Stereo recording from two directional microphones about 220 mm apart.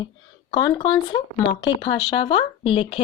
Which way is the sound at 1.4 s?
60° left (ahead or behind).